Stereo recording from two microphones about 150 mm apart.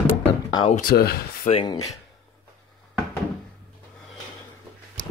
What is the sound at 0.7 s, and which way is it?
Speech, 80° left.